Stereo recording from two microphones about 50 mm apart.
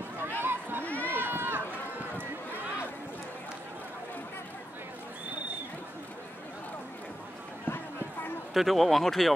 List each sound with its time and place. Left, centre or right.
0.4 s a sound: right
0.8 s run: left
1.2 s run: right
8.5 s speech: centre